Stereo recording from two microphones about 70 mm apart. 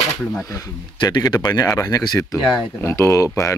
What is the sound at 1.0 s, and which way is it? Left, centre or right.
Speech, left.